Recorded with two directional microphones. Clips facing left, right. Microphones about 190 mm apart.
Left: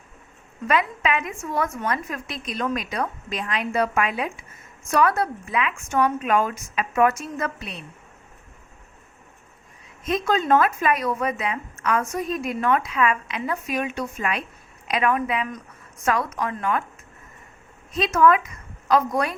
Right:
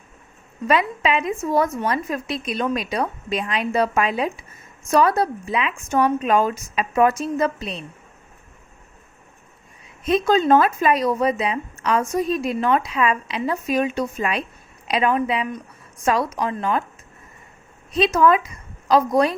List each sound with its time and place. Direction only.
0.7 s a woman's voice: 25° right (ahead or behind)
10.1 s a woman's voice: 30° right (ahead or behind)
18.0 s a woman's voice: 30° right (ahead or behind)